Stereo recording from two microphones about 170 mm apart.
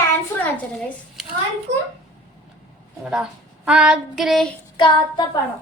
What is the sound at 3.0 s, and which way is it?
Child singing, centre (ahead or behind).